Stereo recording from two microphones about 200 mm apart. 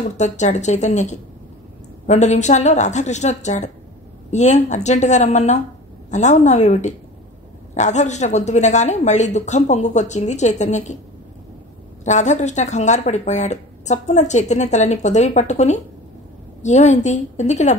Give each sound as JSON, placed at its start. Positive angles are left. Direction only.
{"t": 0.2, "sound": "speech", "side_deg": 35}
{"t": 12.0, "sound": "speech", "side_deg": 35}